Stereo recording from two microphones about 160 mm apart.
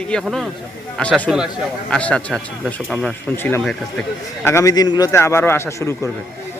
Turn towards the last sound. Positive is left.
turn(degrees=15)  # may be behind; listen again after turning